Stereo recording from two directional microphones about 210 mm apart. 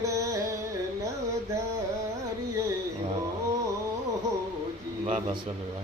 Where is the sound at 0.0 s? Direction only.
15° right (ahead or behind).